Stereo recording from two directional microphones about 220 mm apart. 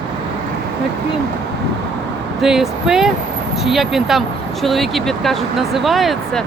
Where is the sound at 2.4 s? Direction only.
Centre (ahead or behind).